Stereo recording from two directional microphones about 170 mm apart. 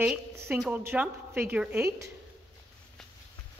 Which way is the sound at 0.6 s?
10° right (ahead or behind).